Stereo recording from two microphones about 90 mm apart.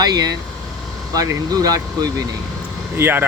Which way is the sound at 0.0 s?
45° right (ahead or behind).